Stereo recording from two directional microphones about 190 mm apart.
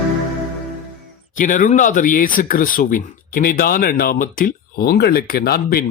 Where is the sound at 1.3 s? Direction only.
45° left (ahead or behind).